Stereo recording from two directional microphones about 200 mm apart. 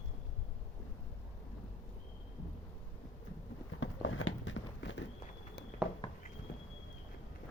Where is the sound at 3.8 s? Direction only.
85° left; by 5.0 s 70° left (ahead or behind).